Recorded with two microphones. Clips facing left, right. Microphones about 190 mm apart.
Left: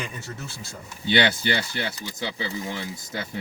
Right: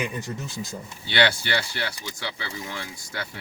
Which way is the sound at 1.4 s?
20° left (ahead or behind).